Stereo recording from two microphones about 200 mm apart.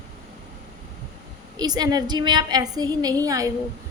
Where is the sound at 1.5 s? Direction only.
20° right (ahead or behind).